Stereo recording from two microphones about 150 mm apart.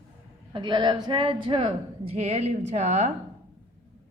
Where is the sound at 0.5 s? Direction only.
30° right (ahead or behind); by 3.1 s 50° right (ahead or behind).